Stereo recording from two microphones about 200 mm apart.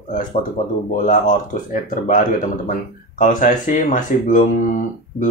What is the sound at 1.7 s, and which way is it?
Speech, 40° left (ahead or behind).